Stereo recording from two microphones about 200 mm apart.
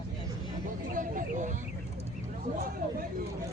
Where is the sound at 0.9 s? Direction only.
40° right (ahead or behind).